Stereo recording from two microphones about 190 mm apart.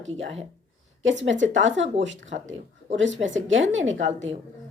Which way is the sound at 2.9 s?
80° right.